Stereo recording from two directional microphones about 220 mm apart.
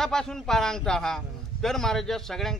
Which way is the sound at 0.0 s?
5° left (ahead or behind).